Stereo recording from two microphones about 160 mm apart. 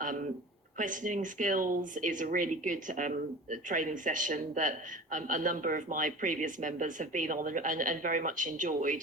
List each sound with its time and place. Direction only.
0.8 s speech: 55° right (ahead or behind)